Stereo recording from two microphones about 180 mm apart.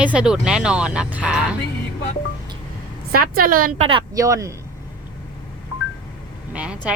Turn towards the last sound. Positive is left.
turn(degrees=-5)  # may be behind; listen again after turning